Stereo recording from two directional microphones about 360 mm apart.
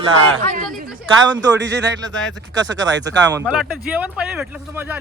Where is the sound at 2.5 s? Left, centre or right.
Right.